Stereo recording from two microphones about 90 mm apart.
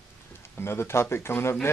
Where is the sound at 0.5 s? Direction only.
30° left (ahead or behind).